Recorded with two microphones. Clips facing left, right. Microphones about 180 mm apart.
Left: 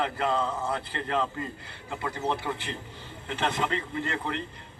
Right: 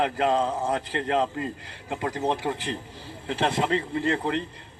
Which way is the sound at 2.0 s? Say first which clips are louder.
Right 4 dB; 35° right (ahead or behind).